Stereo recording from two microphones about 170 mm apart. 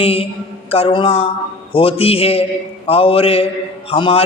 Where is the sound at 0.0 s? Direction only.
35° left (ahead or behind).